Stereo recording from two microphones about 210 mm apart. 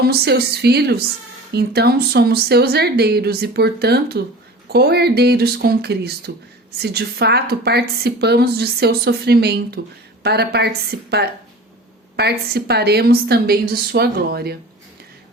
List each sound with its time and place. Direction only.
0.0 s a woman's voice: 50° right (ahead or behind)